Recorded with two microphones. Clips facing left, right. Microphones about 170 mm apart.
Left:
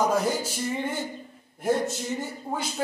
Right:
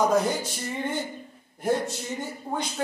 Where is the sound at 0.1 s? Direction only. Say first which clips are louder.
Right 1 dB; 5° left (ahead or behind).